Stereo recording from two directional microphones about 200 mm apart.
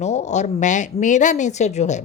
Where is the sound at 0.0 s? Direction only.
35° left (ahead or behind).